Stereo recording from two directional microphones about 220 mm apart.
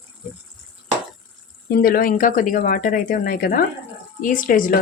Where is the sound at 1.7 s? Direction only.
45° left (ahead or behind).